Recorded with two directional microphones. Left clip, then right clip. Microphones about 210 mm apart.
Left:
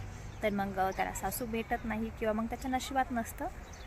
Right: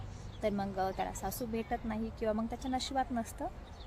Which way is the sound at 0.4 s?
Centre (ahead or behind).